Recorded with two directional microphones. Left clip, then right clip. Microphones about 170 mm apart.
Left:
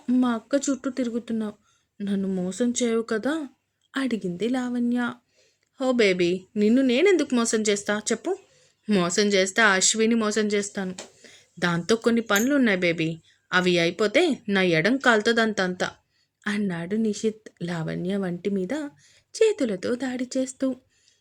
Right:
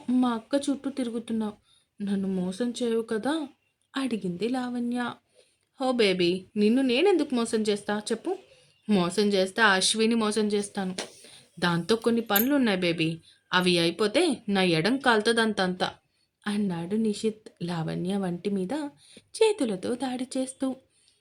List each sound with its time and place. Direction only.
0.1 s speech: 15° left (ahead or behind)